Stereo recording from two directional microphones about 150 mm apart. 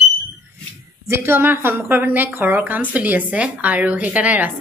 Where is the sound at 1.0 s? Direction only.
15° right (ahead or behind).